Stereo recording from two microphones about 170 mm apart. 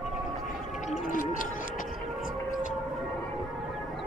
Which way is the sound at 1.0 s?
50° left (ahead or behind).